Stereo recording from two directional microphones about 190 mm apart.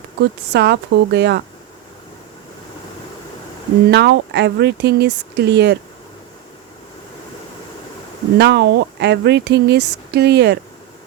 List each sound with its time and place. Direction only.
0.2 s speech: 60° right (ahead or behind)
3.9 s speech: 65° right (ahead or behind)
8.4 s speech: 65° right (ahead or behind)